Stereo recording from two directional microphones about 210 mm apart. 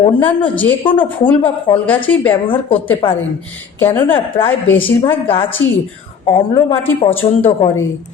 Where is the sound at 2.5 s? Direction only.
25° left (ahead or behind).